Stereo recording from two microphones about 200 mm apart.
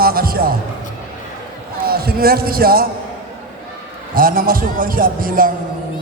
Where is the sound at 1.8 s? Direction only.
50° right (ahead or behind).